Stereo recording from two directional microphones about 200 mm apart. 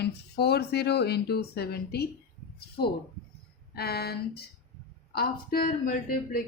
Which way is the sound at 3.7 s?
55° left (ahead or behind).